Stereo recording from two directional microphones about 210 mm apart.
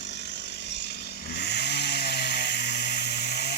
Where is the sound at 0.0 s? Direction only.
55° left (ahead or behind).